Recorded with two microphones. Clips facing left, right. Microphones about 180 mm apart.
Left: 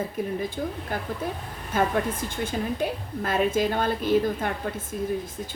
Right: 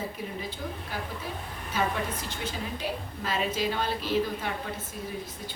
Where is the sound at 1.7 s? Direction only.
50° left (ahead or behind).